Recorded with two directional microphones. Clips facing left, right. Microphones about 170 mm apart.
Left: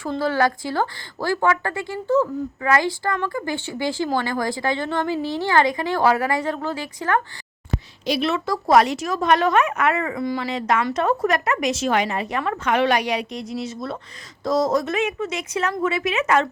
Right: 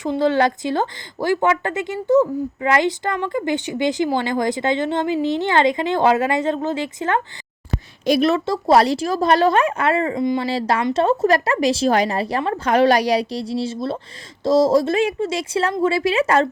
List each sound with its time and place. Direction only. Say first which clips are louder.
0.0 s speech: right 4 dB; 20° right (ahead or behind)
8.0 s a woman's voice: right 6 dB; 45° right (ahead or behind)
8.4 s speech: right 2 dB; 30° right (ahead or behind)